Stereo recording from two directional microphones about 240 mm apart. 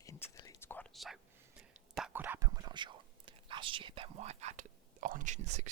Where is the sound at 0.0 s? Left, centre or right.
Centre.